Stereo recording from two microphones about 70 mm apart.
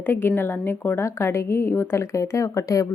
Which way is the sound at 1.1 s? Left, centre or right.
Left.